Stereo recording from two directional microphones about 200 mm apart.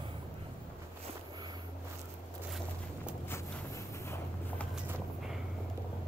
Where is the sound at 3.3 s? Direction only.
15° left (ahead or behind).